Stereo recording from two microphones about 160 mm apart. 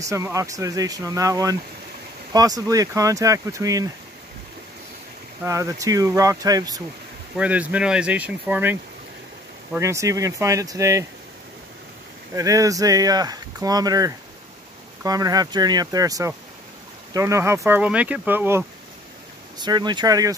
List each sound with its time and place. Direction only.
0.0 s speech: 20° right (ahead or behind)
5.4 s speech: 20° right (ahead or behind)
7.3 s speech: 10° right (ahead or behind)
9.8 s speech: 20° right (ahead or behind)
12.4 s speech: 20° right (ahead or behind)
19.6 s speech: 25° right (ahead or behind)